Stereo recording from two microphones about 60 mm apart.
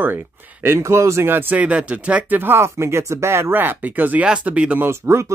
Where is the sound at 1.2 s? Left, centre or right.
Right.